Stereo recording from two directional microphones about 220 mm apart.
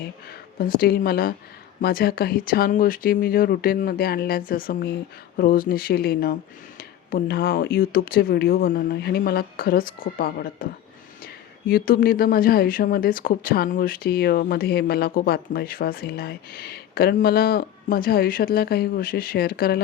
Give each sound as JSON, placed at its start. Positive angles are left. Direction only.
{"t": 0.3, "sound": "speech", "side_deg": 40}
{"t": 11.7, "sound": "speech", "side_deg": 40}